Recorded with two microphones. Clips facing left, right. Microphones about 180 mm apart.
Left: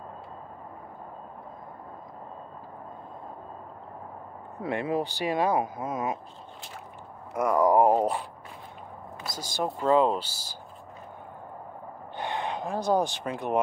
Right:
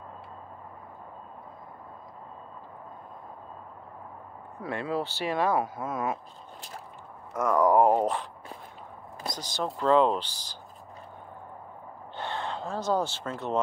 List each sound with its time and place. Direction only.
4.6 s speech: 20° left (ahead or behind)
7.3 s speech: 10° left (ahead or behind)
9.3 s speech: 10° left (ahead or behind)
12.2 s speech: 15° left (ahead or behind)